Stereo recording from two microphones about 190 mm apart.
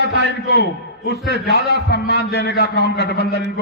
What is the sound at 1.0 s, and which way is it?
A man's voice, 60° left (ahead or behind).